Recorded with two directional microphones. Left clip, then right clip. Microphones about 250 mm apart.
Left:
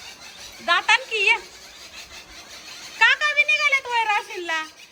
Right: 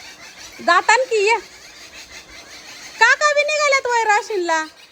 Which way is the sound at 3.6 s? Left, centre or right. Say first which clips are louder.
Right 4 dB; right.